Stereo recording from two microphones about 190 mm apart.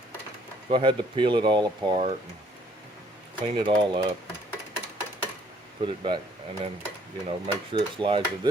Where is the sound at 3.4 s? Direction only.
25° right (ahead or behind).